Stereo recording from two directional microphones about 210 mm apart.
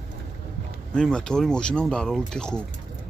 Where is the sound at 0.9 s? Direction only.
5° left (ahead or behind).